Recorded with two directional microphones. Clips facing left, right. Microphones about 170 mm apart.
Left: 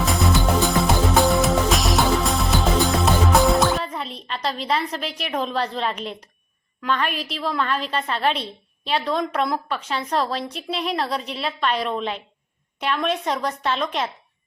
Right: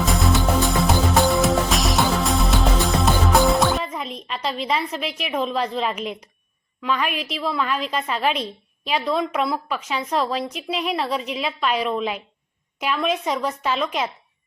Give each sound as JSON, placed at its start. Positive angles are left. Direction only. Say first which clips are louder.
{"t": 0.0, "sound": "music", "louder": "even", "side_deg": 0}
{"t": 4.3, "sound": "a sound", "louder": "even", "side_deg": -5}
{"t": 4.7, "sound": "a woman's voice", "louder": "even", "side_deg": -5}
{"t": 7.1, "sound": "a woman's voice", "louder": "right 1 dB", "side_deg": 35}
{"t": 7.3, "sound": "a woman's voice", "louder": "even", "side_deg": -5}